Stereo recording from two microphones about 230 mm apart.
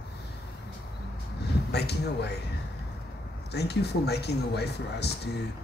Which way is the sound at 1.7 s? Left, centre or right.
Left.